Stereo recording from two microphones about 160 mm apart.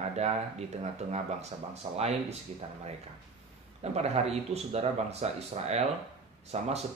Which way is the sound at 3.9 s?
40° right (ahead or behind).